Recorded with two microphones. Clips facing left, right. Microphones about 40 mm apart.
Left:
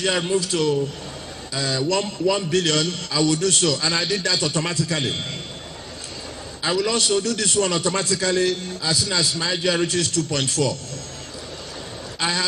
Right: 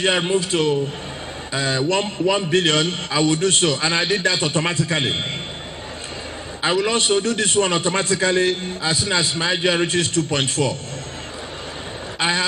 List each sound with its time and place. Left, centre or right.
0.0 s a man's voice: right
6.6 s a man's voice: right
12.2 s a man's voice: right